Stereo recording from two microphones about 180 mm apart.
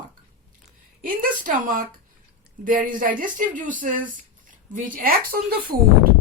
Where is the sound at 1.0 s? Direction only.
50° right (ahead or behind).